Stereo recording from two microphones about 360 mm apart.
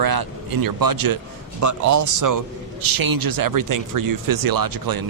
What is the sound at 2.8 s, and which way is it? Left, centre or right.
Speech, right.